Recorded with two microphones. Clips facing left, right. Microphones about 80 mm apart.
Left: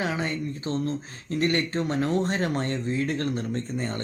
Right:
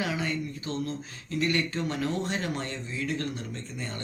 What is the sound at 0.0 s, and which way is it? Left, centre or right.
Speech, left.